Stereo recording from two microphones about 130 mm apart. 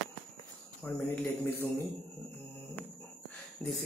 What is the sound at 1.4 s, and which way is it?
Speech, 15° left (ahead or behind).